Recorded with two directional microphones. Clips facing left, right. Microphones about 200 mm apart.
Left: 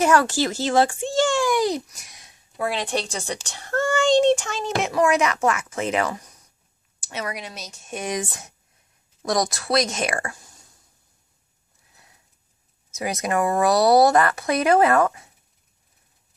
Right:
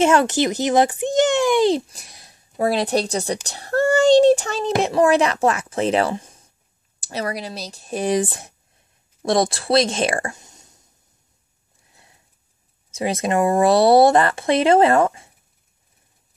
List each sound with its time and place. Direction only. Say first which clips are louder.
0.0 s a child's voice: right 3 dB; 25° right (ahead or behind)
12.9 s speech: right 4 dB; 25° right (ahead or behind)